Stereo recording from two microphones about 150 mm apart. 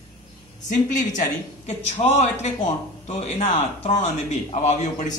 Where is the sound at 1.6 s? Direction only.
45° left (ahead or behind).